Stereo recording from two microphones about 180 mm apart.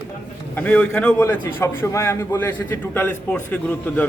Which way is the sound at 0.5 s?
10° left (ahead or behind).